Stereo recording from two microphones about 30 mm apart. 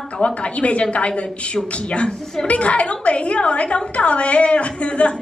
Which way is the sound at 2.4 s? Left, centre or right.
Left.